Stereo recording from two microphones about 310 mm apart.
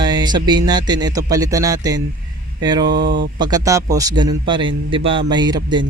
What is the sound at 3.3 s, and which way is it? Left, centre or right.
A man's voice, centre.